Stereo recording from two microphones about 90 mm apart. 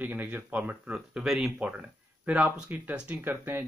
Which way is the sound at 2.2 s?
15° right (ahead or behind).